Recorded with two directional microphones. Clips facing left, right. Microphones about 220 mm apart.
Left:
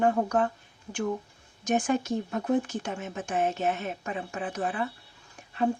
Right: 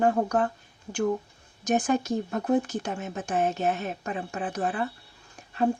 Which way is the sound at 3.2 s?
35° right (ahead or behind).